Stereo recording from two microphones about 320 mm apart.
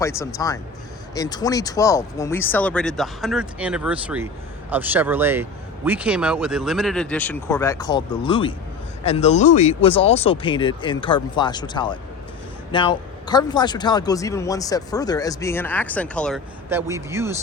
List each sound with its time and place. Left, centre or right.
0.0 s speech: centre